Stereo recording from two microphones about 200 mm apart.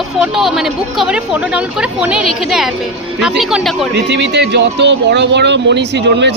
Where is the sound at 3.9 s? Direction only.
60° right (ahead or behind).